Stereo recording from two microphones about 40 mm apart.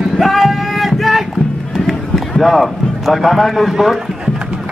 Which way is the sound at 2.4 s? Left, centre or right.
Centre.